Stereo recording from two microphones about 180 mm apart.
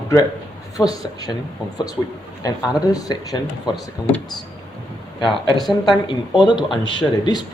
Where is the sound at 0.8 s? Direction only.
Centre (ahead or behind).